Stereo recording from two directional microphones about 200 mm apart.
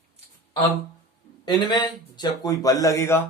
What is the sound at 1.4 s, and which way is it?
Speech, 20° left (ahead or behind).